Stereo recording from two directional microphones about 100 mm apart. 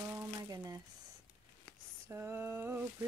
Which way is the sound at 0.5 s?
35° right (ahead or behind).